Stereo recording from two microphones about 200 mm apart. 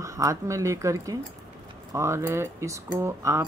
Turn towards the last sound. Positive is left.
turn(degrees=-15)  # may be behind; listen again after turning